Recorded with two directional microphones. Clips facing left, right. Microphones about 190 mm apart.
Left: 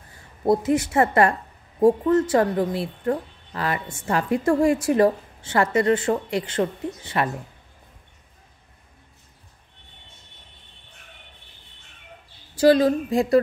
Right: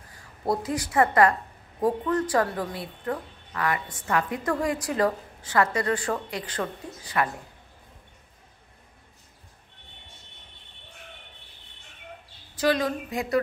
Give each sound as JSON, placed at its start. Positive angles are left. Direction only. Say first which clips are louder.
{"t": 0.1, "sound": "a woman's voice", "louder": "left 7 dB", "side_deg": 25}
{"t": 12.5, "sound": "a woman's voice", "louder": "left 8 dB", "side_deg": 30}